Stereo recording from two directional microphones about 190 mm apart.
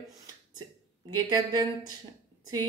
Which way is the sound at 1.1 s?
20° right (ahead or behind).